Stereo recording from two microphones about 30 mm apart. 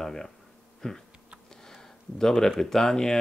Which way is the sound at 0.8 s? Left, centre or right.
Left.